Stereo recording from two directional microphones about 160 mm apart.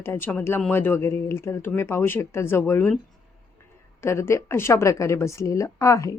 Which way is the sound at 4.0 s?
15° left (ahead or behind).